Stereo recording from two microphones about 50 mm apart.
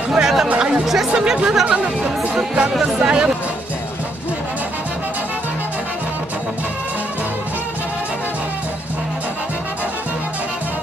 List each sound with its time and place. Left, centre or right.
0.1 s chatter: centre
0.8 s speech: centre